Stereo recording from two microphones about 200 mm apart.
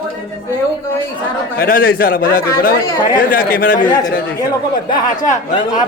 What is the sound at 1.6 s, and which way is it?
A man's voice, 45° left (ahead or behind).